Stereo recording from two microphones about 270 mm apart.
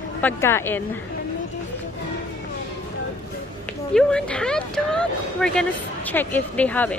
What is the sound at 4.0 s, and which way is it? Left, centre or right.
Speech, centre.